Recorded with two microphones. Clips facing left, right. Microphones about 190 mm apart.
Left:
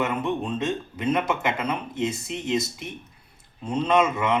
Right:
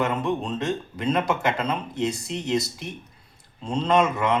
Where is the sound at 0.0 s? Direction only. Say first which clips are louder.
Right 1 dB; 20° left (ahead or behind).